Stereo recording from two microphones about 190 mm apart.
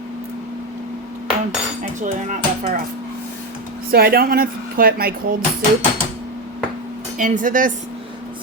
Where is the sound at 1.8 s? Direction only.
40° right (ahead or behind).